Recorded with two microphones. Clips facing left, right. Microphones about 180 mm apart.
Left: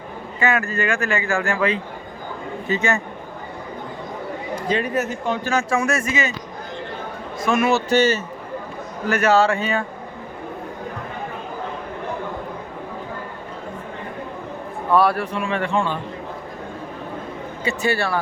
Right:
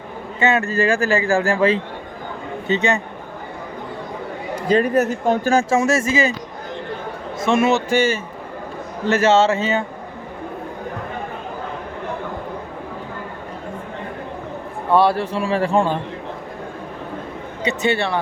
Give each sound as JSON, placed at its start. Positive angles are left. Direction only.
{"t": 0.3, "sound": "speech", "side_deg": -25}
{"t": 4.7, "sound": "a man's voice", "side_deg": -40}
{"t": 5.5, "sound": "speech", "side_deg": -25}
{"t": 7.3, "sound": "a man's voice", "side_deg": -25}
{"t": 7.9, "sound": "a man's voice", "side_deg": -10}
{"t": 9.0, "sound": "speech", "side_deg": -25}
{"t": 14.9, "sound": "a man's voice", "side_deg": -25}
{"t": 17.6, "sound": "speech", "side_deg": -20}